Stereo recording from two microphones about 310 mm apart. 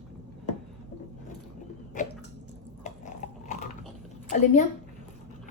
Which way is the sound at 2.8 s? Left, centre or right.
Left.